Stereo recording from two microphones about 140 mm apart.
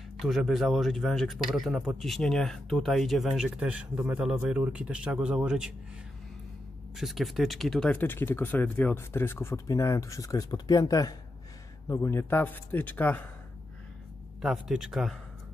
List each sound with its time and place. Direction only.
0.2 s speech: centre (ahead or behind)
7.0 s speech: centre (ahead or behind)
8.0 s speech: 15° left (ahead or behind)
14.4 s speech: 5° right (ahead or behind)